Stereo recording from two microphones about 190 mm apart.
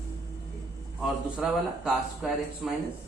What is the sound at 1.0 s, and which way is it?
Speech, centre (ahead or behind).